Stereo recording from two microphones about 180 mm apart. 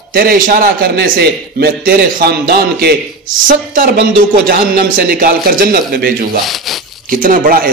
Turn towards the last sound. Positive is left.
turn(degrees=-50)  # may be behind; listen again after turning